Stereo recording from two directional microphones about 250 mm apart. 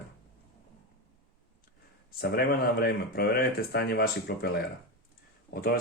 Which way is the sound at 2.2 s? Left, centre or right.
Left.